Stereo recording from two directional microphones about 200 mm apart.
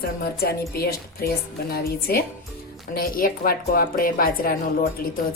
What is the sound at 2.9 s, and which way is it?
Music, 45° left (ahead or behind).